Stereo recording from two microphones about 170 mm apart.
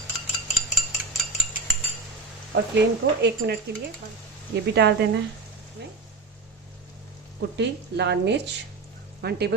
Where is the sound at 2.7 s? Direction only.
80° right.